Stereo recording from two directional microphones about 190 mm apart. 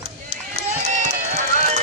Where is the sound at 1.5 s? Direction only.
40° right (ahead or behind).